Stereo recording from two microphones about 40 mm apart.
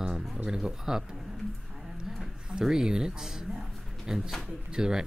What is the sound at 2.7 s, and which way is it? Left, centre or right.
Speech, centre.